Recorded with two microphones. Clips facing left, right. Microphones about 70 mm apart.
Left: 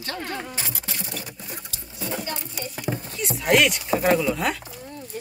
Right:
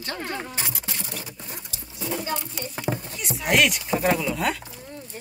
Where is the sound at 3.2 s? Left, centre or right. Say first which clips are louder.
Left 2 dB; centre.